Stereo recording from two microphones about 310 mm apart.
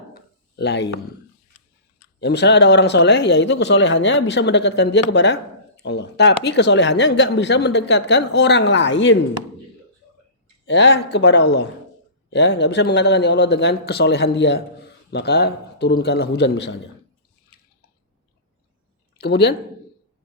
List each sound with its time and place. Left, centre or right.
0.1 s a sound: left
2.2 s speech: left
10.7 s speech: left
19.2 s speech: left